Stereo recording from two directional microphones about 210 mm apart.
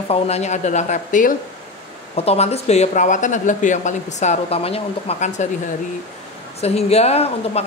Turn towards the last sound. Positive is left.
turn(degrees=30)  # may be behind; listen again after turning